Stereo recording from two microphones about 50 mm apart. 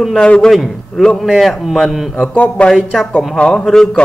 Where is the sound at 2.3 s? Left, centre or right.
Left.